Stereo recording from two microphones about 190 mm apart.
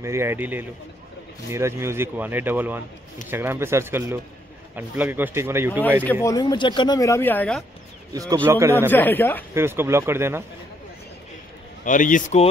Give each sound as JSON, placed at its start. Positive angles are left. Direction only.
{"t": 0.0, "sound": "speech", "side_deg": -15}
{"t": 5.7, "sound": "speech", "side_deg": 10}
{"t": 6.2, "sound": "speech", "side_deg": 20}
{"t": 8.1, "sound": "speech", "side_deg": -20}
{"t": 8.9, "sound": "speech", "side_deg": 10}
{"t": 9.5, "sound": "speech", "side_deg": -10}
{"t": 11.8, "sound": "a man's voice", "side_deg": 45}